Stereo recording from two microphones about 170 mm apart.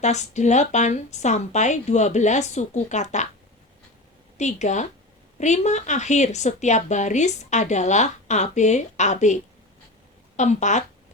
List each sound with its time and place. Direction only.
0.0 s a woman's voice: 40° left (ahead or behind)
4.4 s a woman's voice: 45° left (ahead or behind)